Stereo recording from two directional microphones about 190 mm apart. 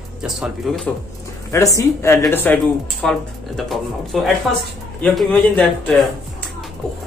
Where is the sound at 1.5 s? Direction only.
15° left (ahead or behind).